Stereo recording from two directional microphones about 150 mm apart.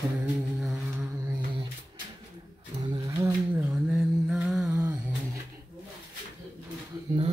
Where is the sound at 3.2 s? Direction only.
10° right (ahead or behind).